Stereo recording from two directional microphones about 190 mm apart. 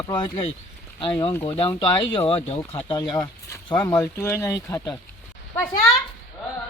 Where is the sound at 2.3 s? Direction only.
35° left (ahead or behind).